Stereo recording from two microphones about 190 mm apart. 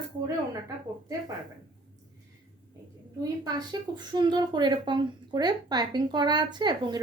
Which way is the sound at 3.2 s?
20° right (ahead or behind).